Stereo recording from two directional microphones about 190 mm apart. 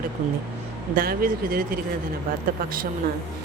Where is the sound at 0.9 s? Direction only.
50° right (ahead or behind).